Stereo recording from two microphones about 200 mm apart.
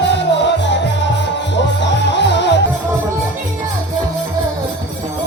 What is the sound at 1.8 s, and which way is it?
Music, 60° left (ahead or behind).